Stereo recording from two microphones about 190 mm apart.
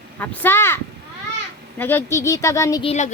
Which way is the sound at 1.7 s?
10° left (ahead or behind).